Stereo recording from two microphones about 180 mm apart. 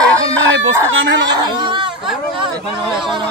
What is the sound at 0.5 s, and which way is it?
Chicken, 90° right.